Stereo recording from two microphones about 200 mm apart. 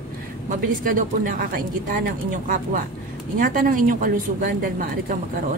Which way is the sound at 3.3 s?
45° right (ahead or behind).